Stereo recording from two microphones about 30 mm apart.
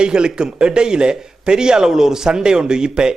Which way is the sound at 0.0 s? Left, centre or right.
Right.